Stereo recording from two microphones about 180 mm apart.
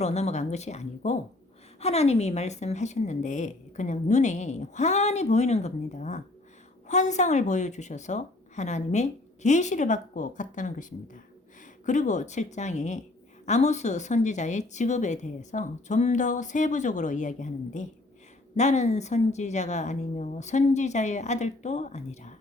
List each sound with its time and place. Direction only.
0.0 s a woman's voice: 40° left (ahead or behind)